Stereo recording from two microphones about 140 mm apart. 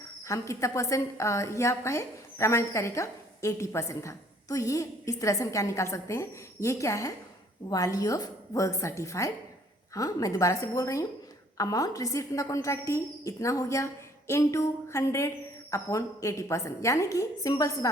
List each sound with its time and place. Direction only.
0.3 s a woman's voice: 20° left (ahead or behind)